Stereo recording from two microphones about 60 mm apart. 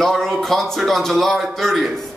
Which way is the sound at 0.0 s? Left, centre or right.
Centre.